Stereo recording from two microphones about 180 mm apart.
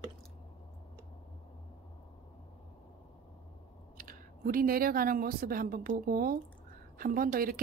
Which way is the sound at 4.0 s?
50° right (ahead or behind).